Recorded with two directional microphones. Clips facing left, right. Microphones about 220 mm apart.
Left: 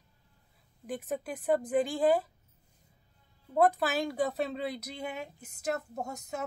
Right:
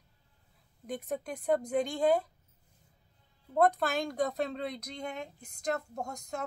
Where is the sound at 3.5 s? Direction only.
5° left (ahead or behind).